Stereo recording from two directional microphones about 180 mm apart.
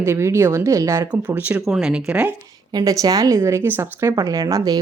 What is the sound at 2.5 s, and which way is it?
Speech, 20° right (ahead or behind).